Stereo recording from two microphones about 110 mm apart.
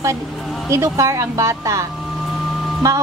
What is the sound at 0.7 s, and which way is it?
A woman's voice, 25° right (ahead or behind).